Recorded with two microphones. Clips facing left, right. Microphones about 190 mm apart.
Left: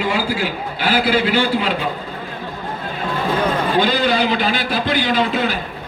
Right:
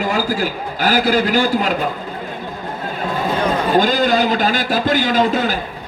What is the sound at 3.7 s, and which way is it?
A man's voice, 45° right (ahead or behind).